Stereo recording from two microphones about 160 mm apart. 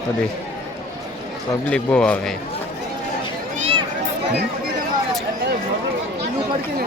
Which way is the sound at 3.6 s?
35° right (ahead or behind).